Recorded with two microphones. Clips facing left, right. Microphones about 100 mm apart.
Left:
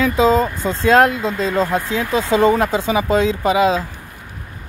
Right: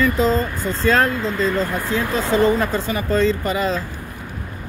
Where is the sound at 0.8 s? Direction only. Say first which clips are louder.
Left 5 dB; 70° left (ahead or behind).